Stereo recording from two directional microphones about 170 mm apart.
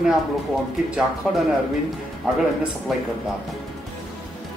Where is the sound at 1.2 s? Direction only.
5° right (ahead or behind).